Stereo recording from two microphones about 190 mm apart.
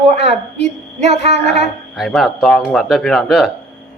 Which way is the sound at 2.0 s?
Centre (ahead or behind).